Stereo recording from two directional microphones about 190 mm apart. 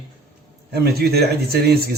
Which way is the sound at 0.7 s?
55° right (ahead or behind).